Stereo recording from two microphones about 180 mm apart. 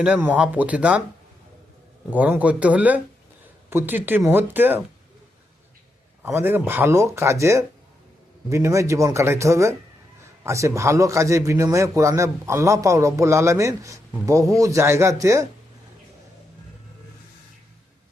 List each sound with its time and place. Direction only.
0.0 s a man's voice: 10° right (ahead or behind)
2.0 s a man's voice: 10° right (ahead or behind)
6.2 s a man's voice: 10° right (ahead or behind)